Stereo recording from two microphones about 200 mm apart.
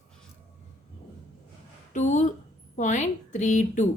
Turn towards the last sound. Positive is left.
turn(degrees=35)  # may be behind; listen again after turning